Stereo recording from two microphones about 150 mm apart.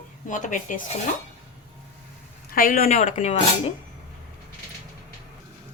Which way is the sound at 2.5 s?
70° left (ahead or behind).